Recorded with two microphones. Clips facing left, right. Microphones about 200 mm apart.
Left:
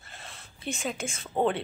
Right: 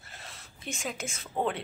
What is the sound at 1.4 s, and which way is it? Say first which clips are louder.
Speech: left 4 dB; 30° left (ahead or behind).